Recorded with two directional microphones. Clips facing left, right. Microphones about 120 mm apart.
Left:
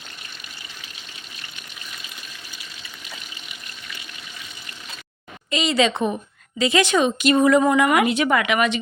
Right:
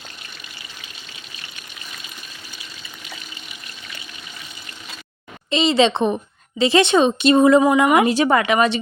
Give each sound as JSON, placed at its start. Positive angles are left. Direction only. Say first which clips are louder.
{"t": 5.5, "sound": "speech", "louder": "right 4 dB", "side_deg": -25}